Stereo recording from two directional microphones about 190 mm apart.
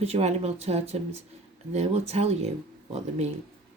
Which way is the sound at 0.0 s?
35° right (ahead or behind).